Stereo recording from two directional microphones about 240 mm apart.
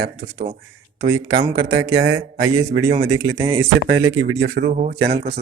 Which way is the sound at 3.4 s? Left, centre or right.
Centre.